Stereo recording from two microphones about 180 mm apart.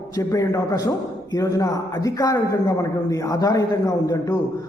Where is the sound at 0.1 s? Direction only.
20° left (ahead or behind).